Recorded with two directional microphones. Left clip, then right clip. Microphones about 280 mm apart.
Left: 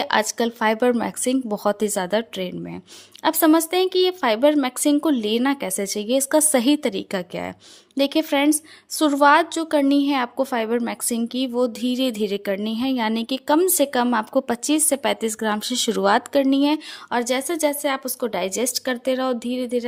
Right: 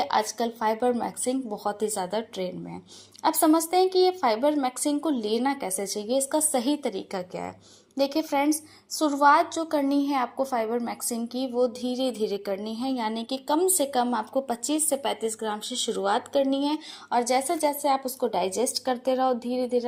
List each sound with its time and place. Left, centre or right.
0.0 s a woman's voice: left
6.7 s speech: left
8.3 s a woman's voice: left
11.9 s speech: left
12.5 s a woman's voice: left
16.3 s speech: left
16.6 s a woman's voice: left
18.7 s speech: left
19.5 s a woman's voice: left